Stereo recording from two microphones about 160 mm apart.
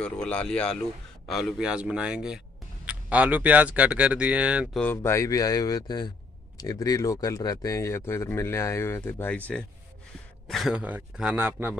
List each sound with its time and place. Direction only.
0.0 s speech: 5° left (ahead or behind)
4.7 s speech: 15° left (ahead or behind)
10.5 s a man's voice: centre (ahead or behind)